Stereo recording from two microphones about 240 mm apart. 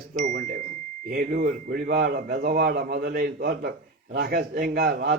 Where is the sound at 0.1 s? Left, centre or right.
Right.